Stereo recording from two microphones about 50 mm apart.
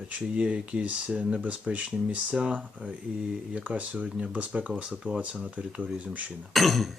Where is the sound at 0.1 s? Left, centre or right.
Right.